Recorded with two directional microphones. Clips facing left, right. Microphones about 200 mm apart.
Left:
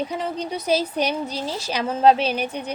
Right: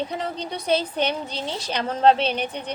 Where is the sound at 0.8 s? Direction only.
10° left (ahead or behind).